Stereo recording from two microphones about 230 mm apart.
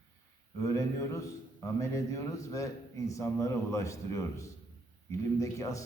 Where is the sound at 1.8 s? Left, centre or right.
Centre.